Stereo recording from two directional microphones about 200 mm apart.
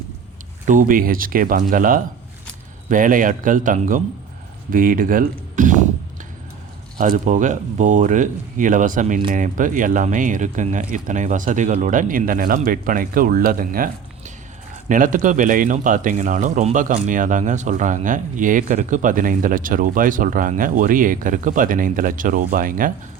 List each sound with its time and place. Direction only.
0.6 s speech: 40° right (ahead or behind)
7.0 s speech: 40° right (ahead or behind)